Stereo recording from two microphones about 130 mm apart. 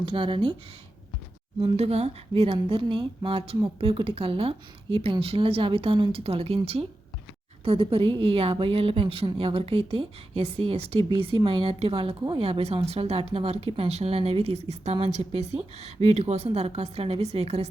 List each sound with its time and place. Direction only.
0.0 s speech: 40° right (ahead or behind)
1.6 s a woman's voice: 50° right (ahead or behind)